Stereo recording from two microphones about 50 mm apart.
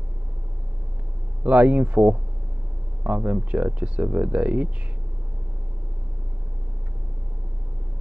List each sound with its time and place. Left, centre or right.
1.4 s speech: right